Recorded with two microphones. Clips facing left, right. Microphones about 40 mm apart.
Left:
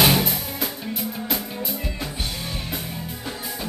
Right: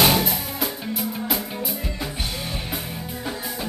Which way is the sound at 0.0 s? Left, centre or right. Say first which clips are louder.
Even; centre.